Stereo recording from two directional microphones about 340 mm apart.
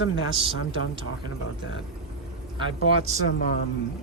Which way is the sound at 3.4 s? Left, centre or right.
Left.